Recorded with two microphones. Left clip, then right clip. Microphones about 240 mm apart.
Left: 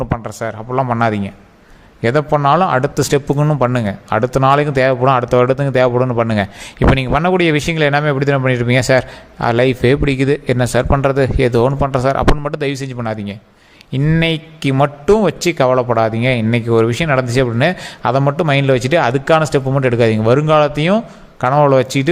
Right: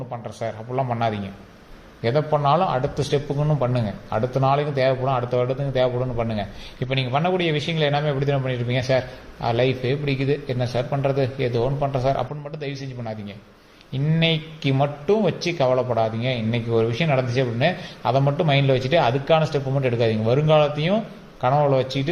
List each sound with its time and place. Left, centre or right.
0.3 s a man's voice: left